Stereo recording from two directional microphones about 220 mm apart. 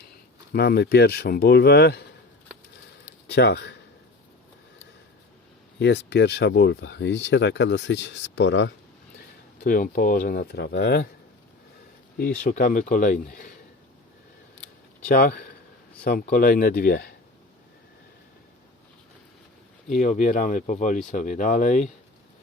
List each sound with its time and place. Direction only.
0.5 s speech: 45° left (ahead or behind)
3.2 s speech: 50° left (ahead or behind)
5.8 s speech: 50° left (ahead or behind)
9.6 s speech: 40° left (ahead or behind)
12.1 s speech: 40° left (ahead or behind)
15.0 s speech: 40° left (ahead or behind)
19.9 s speech: 35° left (ahead or behind)